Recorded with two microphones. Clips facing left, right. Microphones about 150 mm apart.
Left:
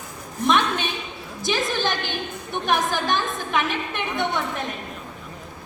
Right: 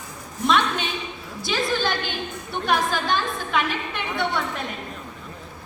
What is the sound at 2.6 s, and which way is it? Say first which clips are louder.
A woman's voice: even; 15° left (ahead or behind).